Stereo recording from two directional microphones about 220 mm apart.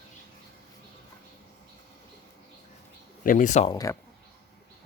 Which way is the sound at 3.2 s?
35° left (ahead or behind).